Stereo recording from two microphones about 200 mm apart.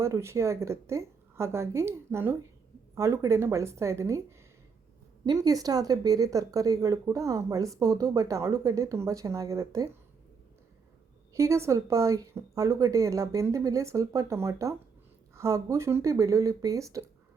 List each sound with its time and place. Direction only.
0.0 s speech: 15° right (ahead or behind)
11.3 s speech: 15° right (ahead or behind)